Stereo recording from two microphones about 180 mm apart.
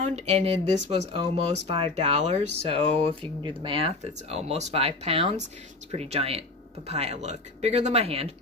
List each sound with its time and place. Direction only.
0.0 s speech: 35° right (ahead or behind)